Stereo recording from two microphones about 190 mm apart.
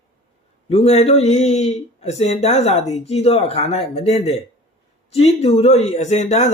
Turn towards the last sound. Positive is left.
turn(degrees=35)  # may be behind; listen again after turning